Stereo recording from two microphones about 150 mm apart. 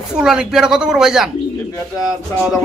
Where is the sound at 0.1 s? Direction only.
5° right (ahead or behind).